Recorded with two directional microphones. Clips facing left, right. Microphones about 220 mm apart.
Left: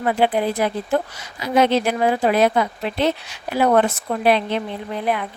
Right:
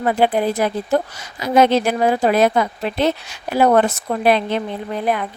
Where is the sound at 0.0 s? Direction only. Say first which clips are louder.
Right 2 dB; 40° right (ahead or behind).